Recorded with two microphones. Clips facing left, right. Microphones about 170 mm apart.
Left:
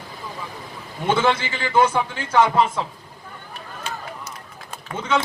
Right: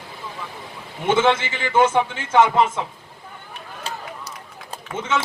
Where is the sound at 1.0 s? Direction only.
20° right (ahead or behind).